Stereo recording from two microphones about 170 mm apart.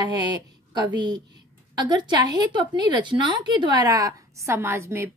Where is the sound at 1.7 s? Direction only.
25° right (ahead or behind).